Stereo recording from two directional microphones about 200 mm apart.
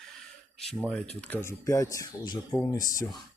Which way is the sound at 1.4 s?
15° left (ahead or behind).